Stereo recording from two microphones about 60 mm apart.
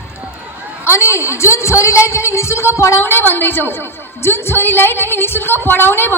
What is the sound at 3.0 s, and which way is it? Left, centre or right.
A woman's voice, left.